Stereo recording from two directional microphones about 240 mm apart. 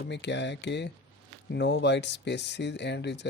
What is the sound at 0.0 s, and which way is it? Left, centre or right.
Speech, left.